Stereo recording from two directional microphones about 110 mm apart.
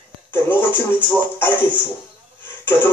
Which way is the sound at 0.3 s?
20° left (ahead or behind).